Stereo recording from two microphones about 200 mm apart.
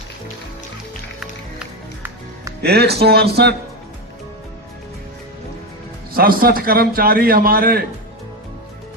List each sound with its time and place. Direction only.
2.6 s a man's voice: 55° right (ahead or behind)
6.1 s a man's voice: 45° right (ahead or behind)